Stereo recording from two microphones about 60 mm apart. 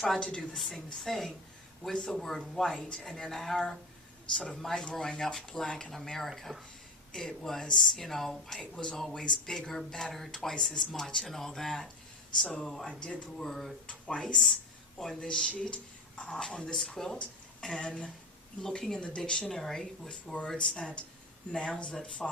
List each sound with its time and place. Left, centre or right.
0.2 s speech: centre
0.5 s a woman's voice: centre
13.0 s speech: left
13.3 s a woman's voice: centre
17.0 s a woman's voice: centre
17.6 s speech: centre